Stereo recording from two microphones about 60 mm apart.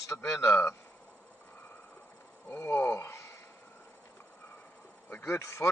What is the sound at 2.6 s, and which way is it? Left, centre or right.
Speech, left.